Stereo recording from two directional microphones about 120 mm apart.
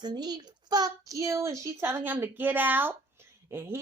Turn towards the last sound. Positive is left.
turn(degrees=-20)  # may be behind; listen again after turning